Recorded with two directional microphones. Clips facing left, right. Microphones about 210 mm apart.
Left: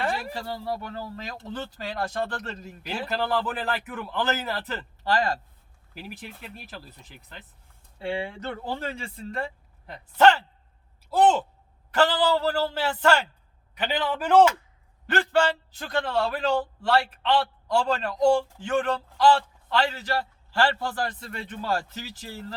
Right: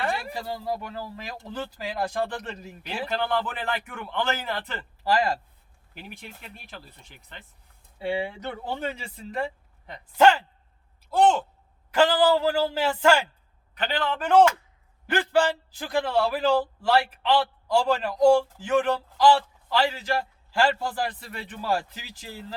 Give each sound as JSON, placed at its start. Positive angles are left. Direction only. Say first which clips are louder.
{"t": 0.0, "sound": "a sound", "louder": "even", "side_deg": 0}
{"t": 0.4, "sound": "a man's voice", "louder": "right 1 dB", "side_deg": -15}
{"t": 5.0, "sound": "a man's voice", "louder": "right 1 dB", "side_deg": -10}
{"t": 5.9, "sound": "a man's voice", "louder": "left 3 dB", "side_deg": 5}
{"t": 11.1, "sound": "a man's voice", "louder": "even", "side_deg": 5}
{"t": 11.9, "sound": "a man's voice", "louder": "right 2 dB", "side_deg": -10}
{"t": 13.7, "sound": "a man's voice", "louder": "even", "side_deg": 10}
{"t": 15.0, "sound": "a man's voice", "louder": "even", "side_deg": -10}